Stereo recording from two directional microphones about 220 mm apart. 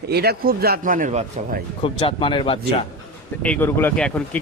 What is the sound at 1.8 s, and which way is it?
Speech, 25° left (ahead or behind).